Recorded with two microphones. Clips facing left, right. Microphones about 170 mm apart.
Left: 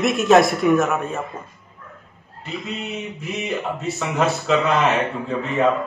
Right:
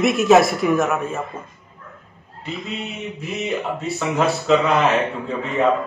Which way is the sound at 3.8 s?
Centre (ahead or behind).